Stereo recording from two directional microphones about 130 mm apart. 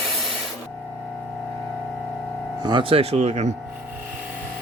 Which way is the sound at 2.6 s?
40° right (ahead or behind).